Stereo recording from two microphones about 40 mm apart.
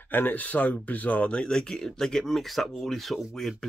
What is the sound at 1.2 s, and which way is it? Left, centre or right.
Speech, left.